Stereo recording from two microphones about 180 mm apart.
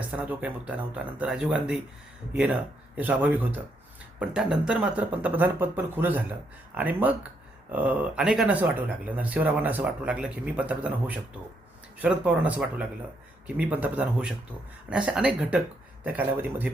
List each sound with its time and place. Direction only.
0.1 s speech: 5° right (ahead or behind)